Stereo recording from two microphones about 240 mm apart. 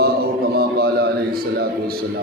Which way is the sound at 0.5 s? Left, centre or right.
Right.